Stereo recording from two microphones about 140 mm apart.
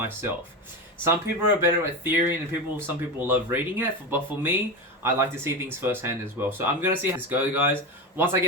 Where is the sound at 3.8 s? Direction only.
15° right (ahead or behind).